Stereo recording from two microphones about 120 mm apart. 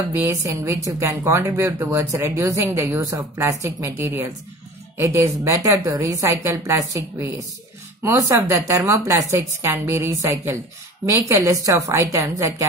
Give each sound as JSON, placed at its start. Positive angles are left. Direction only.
{"t": 0.1, "sound": "speech", "side_deg": -20}